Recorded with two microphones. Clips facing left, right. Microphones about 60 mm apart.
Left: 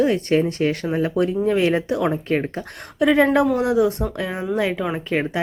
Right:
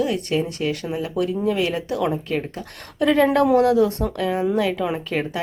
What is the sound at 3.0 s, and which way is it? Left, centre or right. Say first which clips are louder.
A woman's voice: left 1 dB; centre.